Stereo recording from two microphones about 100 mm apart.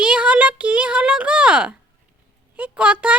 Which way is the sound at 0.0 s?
10° right (ahead or behind).